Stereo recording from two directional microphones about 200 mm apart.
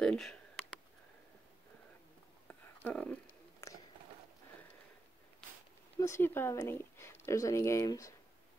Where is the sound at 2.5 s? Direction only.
5° left (ahead or behind).